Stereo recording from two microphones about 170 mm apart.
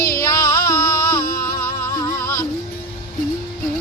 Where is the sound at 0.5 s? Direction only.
20° left (ahead or behind).